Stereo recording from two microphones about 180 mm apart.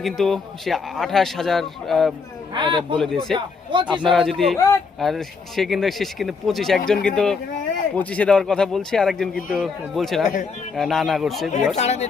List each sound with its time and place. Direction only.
0.0 s speech: centre (ahead or behind)
2.5 s speech: 25° right (ahead or behind)
3.0 s speech: centre (ahead or behind)
3.3 s speech: 25° right (ahead or behind)
3.9 s speech: centre (ahead or behind)
11.5 s speech: 40° left (ahead or behind)